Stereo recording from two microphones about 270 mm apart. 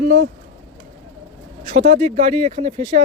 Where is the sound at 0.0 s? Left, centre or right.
Right.